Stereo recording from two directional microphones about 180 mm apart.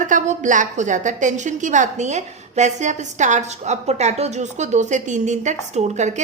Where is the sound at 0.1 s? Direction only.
45° right (ahead or behind).